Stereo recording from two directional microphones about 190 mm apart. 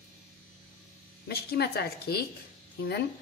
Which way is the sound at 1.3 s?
55° left (ahead or behind).